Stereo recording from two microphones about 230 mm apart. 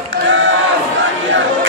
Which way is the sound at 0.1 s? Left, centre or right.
Right.